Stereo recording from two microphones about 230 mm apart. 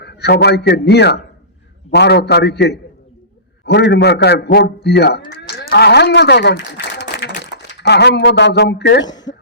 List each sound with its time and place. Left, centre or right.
0.0 s a man's voice: left
5.3 s moo: left
5.7 s a man's voice: left
9.0 s speech: centre